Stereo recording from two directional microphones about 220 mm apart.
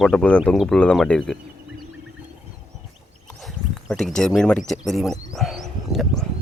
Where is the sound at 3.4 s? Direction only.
Centre (ahead or behind).